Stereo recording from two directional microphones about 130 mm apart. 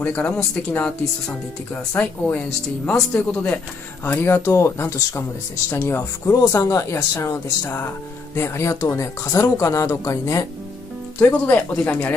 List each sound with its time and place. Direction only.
0.0 s speech: 10° left (ahead or behind)
2.0 s speech: 10° left (ahead or behind)
6.3 s speech: 30° left (ahead or behind)
11.1 s speech: 10° left (ahead or behind)